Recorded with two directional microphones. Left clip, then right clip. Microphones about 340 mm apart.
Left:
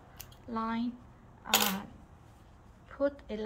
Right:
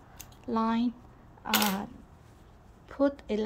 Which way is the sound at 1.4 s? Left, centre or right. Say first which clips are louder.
Right 1 dB; right.